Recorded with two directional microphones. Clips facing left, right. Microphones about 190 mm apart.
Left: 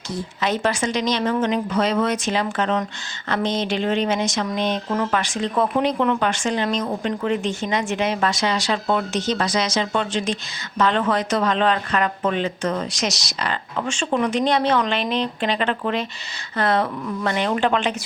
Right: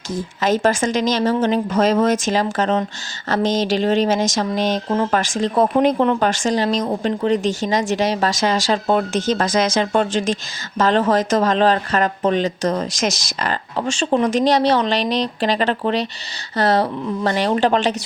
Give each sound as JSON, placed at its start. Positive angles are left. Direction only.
{"t": 0.6, "sound": "speech", "side_deg": -45}
{"t": 13.7, "sound": "speech", "side_deg": -40}